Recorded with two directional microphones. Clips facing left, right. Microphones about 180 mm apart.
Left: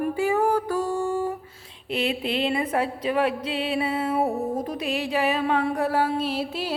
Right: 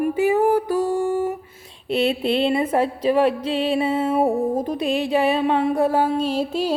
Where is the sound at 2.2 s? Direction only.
30° right (ahead or behind).